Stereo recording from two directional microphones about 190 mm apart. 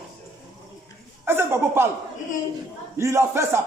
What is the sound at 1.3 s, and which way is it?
Speech, 10° right (ahead or behind).